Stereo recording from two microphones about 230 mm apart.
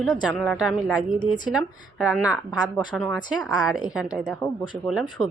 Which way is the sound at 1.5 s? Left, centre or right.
Centre.